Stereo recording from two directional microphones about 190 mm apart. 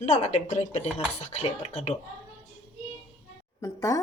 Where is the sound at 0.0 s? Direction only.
35° left (ahead or behind).